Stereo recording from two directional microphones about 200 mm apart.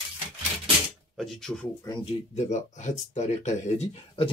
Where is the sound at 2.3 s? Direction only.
35° left (ahead or behind).